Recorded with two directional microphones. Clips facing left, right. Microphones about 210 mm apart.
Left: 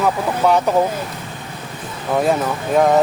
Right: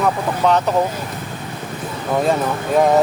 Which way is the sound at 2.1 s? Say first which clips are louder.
Left 1 dB; centre (ahead or behind).